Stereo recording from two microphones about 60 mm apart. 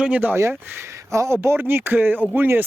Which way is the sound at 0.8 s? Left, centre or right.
Right.